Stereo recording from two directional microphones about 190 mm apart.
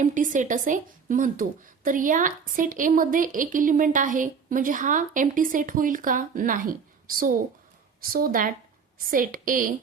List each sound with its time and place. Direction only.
0.0 s speech: 45° right (ahead or behind)